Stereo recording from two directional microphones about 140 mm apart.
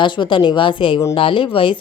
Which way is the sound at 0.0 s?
35° left (ahead or behind).